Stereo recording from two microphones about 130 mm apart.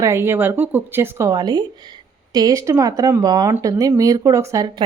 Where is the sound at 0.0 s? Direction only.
20° right (ahead or behind).